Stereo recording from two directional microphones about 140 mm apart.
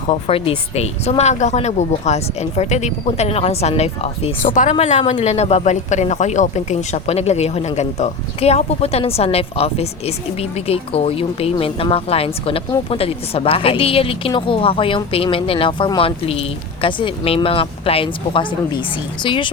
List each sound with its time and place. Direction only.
0.1 s speech: 40° left (ahead or behind)
4.4 s speech: 65° left (ahead or behind)
4.7 s speech: 55° left (ahead or behind); by 19.5 s 35° left (ahead or behind)